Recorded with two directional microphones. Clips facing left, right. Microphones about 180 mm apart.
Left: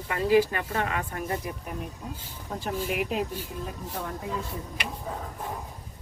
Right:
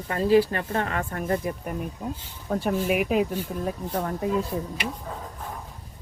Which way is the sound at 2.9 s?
55° right (ahead or behind).